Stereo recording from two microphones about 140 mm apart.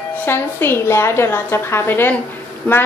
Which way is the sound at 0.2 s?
15° left (ahead or behind).